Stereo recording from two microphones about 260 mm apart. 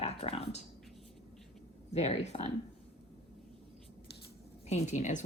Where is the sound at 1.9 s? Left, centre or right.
Left.